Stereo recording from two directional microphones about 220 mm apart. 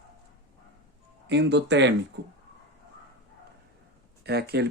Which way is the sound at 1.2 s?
50° right (ahead or behind).